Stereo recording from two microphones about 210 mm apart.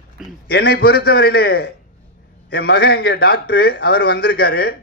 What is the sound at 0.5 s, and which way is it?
A man's voice, 50° left (ahead or behind).